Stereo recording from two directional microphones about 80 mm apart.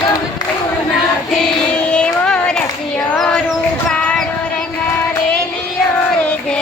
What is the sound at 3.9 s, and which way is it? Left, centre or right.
Child singing, centre.